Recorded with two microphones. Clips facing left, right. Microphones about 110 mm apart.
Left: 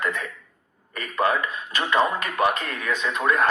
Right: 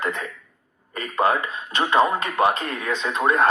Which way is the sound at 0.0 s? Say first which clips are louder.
Right 1 dB; 30° right (ahead or behind).